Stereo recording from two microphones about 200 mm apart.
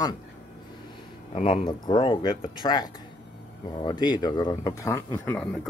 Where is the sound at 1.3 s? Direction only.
30° left (ahead or behind).